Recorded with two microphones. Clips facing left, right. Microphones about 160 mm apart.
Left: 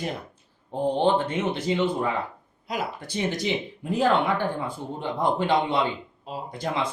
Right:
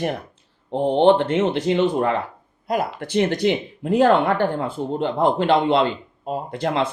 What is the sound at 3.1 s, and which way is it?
Speech, 65° right (ahead or behind).